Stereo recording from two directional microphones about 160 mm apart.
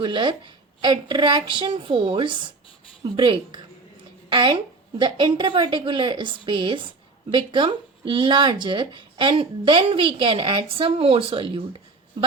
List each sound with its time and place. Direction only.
0.0 s a woman's voice: 30° right (ahead or behind)